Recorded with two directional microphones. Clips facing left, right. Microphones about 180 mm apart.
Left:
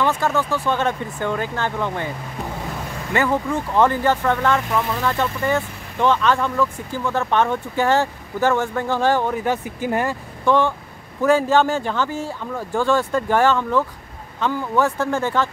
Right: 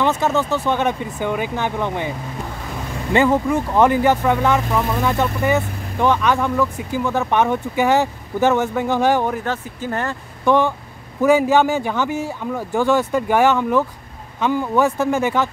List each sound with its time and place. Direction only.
0.0 s speech: 20° right (ahead or behind)
3.4 s speech: 15° right (ahead or behind)
9.4 s speech: 15° left (ahead or behind)
10.4 s speech: 15° right (ahead or behind)